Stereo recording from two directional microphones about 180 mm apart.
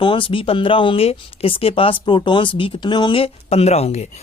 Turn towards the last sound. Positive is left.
turn(degrees=35)  # may be behind; listen again after turning